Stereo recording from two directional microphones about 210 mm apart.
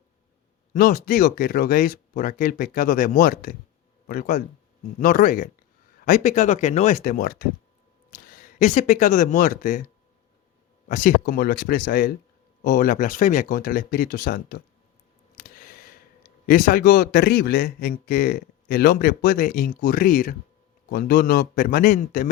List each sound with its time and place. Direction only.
0.7 s speech: 40° left (ahead or behind)
10.8 s a man's voice: 40° left (ahead or behind)
15.4 s a sound: 45° left (ahead or behind)
16.5 s a man's voice: 45° left (ahead or behind)